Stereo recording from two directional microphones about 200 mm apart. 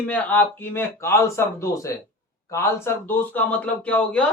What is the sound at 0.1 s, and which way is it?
Speech, 10° left (ahead or behind).